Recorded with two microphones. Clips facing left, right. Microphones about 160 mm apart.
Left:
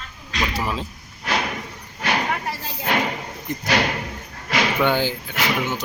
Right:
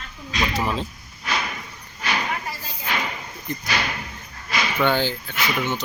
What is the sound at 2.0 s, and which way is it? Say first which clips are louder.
Speech: left 3 dB; 70° left (ahead or behind).